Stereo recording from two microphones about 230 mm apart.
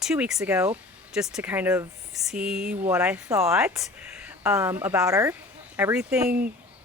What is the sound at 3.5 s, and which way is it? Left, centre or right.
Speech, centre.